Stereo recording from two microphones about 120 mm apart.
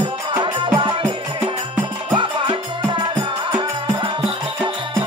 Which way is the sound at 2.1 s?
40° right (ahead or behind).